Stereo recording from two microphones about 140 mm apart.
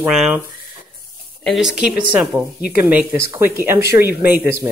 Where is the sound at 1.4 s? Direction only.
5° right (ahead or behind).